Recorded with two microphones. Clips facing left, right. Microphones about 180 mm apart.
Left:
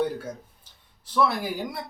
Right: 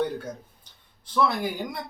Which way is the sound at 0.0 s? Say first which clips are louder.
Left 1 dB; 5° left (ahead or behind).